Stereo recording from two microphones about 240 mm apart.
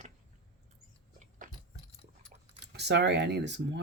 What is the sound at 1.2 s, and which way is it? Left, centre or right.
Chewing, right.